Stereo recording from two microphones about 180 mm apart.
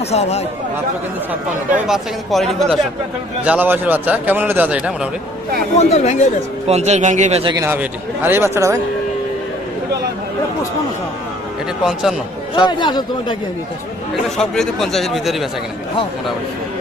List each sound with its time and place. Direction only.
0.1 s speech: 35° left (ahead or behind)
1.9 s a man's voice: centre (ahead or behind)
5.7 s speech: 40° left (ahead or behind)
6.7 s speech: 35° right (ahead or behind)
7.5 s a man's voice: 15° right (ahead or behind)
11.8 s speech: 5° right (ahead or behind)
12.5 s speech: 25° left (ahead or behind)
14.3 s speech: centre (ahead or behind)